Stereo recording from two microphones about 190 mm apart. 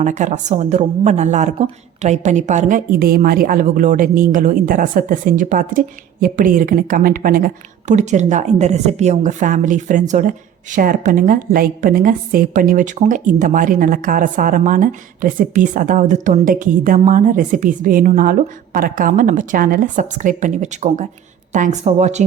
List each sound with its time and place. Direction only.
0.0 s a woman's voice: 40° right (ahead or behind)